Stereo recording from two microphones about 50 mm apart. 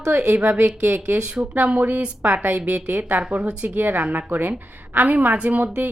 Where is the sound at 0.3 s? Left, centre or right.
Right.